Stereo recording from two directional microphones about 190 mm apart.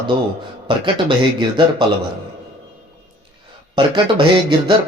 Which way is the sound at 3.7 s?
25° right (ahead or behind).